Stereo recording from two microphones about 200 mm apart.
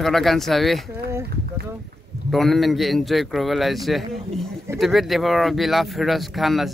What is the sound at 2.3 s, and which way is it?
Speech, centre (ahead or behind).